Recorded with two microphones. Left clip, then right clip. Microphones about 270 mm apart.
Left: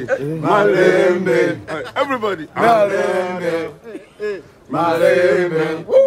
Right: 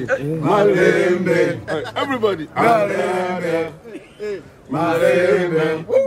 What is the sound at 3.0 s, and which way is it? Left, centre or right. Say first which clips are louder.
Speech: left 2 dB; centre.